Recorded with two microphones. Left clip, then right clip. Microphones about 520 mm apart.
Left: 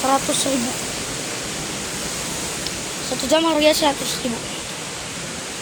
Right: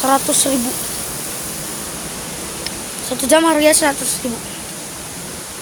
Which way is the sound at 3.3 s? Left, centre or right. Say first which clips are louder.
Right 4 dB; right.